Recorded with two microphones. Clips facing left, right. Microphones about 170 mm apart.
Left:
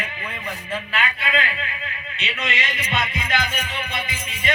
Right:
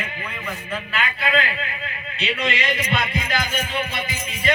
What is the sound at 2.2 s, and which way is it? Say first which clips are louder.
Music: right 4 dB; 35° right (ahead or behind).